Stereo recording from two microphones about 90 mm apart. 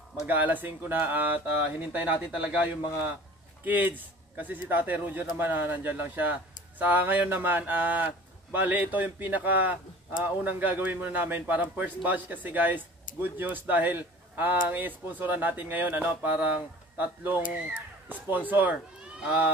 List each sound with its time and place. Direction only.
0.3 s speech: 20° right (ahead or behind)
3.6 s speech: 20° right (ahead or behind)